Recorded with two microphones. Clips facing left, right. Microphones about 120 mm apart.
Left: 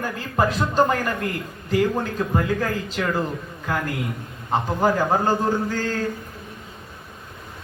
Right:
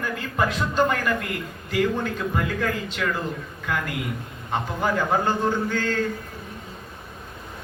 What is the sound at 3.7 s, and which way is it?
Speech, 35° left (ahead or behind).